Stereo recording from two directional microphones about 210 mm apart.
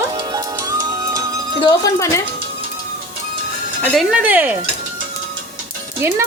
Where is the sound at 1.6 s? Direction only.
15° left (ahead or behind).